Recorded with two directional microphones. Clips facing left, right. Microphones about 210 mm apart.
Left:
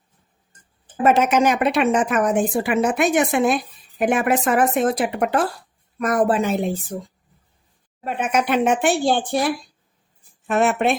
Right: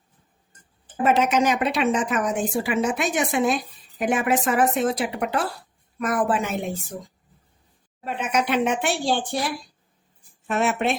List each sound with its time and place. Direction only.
1.0 s a woman's voice: 50° left (ahead or behind)
8.0 s speech: 50° left (ahead or behind)
10.5 s speech: 55° left (ahead or behind)